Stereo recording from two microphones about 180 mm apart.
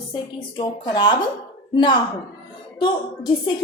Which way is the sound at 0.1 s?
25° left (ahead or behind).